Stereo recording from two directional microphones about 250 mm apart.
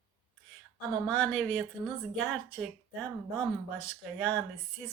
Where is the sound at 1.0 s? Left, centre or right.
Centre.